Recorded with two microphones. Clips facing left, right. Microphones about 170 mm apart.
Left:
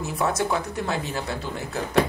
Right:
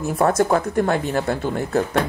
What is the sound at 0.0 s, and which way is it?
Speech, 50° right (ahead or behind).